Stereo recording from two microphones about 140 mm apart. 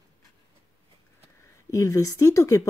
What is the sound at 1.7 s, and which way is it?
Speech, 20° left (ahead or behind).